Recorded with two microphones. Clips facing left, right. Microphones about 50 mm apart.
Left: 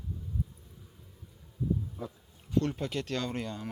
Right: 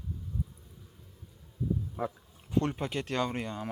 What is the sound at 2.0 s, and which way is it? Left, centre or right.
Speech, right.